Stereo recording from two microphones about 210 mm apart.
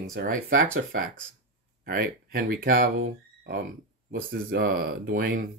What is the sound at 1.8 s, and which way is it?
Speech, 45° right (ahead or behind).